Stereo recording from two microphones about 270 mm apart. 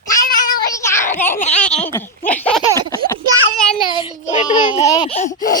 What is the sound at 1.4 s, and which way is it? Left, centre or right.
Speech, left.